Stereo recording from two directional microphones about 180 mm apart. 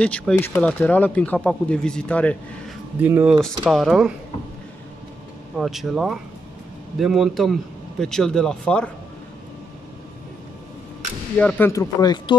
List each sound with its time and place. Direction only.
0.0 s speech: 5° left (ahead or behind)
3.0 s a man's voice: 10° right (ahead or behind)
5.6 s a man's voice: centre (ahead or behind)
11.3 s speech: 10° left (ahead or behind)